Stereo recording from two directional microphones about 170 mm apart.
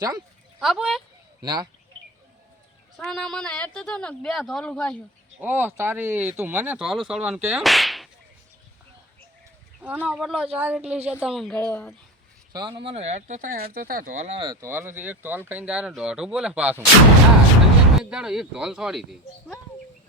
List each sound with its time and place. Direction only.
0.6 s speech: centre (ahead or behind)
1.4 s speech: 25° right (ahead or behind)
3.0 s speech: centre (ahead or behind)
5.4 s speech: 10° right (ahead or behind)
9.8 s speech: 10° right (ahead or behind); by 11.9 s 10° left (ahead or behind)
12.5 s speech: 30° right (ahead or behind); by 14.3 s 45° right (ahead or behind)
14.3 s speech: 25° right (ahead or behind); by 16.8 s 10° right (ahead or behind)
17.9 s speech: 5° right (ahead or behind)